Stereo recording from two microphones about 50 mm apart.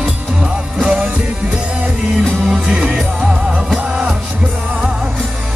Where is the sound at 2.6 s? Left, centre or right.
Right.